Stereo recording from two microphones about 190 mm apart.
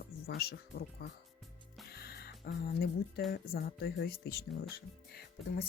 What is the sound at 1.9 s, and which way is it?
Music, 55° left (ahead or behind).